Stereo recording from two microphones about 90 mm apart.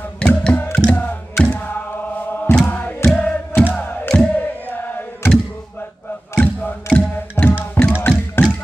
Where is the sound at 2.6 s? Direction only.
20° left (ahead or behind).